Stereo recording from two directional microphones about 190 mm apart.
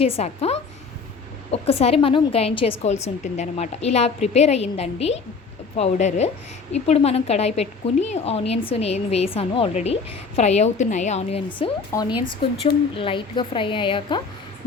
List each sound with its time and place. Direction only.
0.0 s speech: 30° left (ahead or behind)
11.9 s speech: 15° left (ahead or behind)
13.0 s a woman's voice: 25° left (ahead or behind)